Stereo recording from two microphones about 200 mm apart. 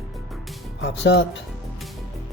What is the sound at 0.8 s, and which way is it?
Music, 60° left (ahead or behind).